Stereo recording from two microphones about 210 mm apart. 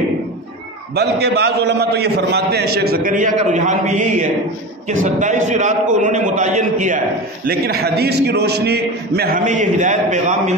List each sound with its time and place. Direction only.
0.9 s a man's voice: 50° right (ahead or behind)
7.4 s a man's voice: 50° right (ahead or behind)